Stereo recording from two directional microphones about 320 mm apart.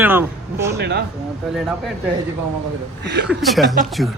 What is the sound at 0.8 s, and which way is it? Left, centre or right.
Speech, right.